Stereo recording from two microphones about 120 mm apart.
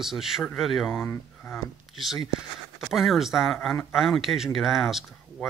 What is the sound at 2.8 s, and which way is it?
Speech, centre (ahead or behind).